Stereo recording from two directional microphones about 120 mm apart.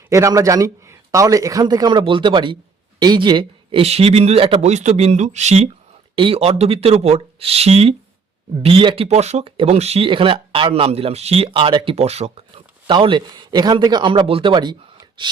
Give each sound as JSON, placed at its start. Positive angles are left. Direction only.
{"t": 0.1, "sound": "a man's voice", "side_deg": -25}
{"t": 4.7, "sound": "speech", "side_deg": -70}
{"t": 6.1, "sound": "speech", "side_deg": -50}
{"t": 9.0, "sound": "speech", "side_deg": -65}
{"t": 12.9, "sound": "speech", "side_deg": -40}